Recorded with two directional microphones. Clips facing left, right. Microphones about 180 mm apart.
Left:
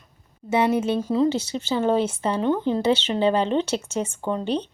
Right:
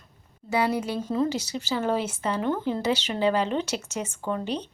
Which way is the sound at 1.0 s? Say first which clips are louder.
Left 4 dB; 10° left (ahead or behind).